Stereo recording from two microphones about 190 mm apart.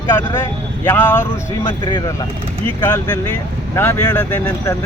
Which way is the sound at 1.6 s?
25° left (ahead or behind).